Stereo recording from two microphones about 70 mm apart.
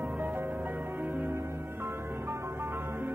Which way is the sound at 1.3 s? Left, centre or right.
Right.